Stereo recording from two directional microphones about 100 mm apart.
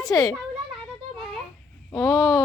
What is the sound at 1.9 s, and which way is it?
Speech, 30° left (ahead or behind).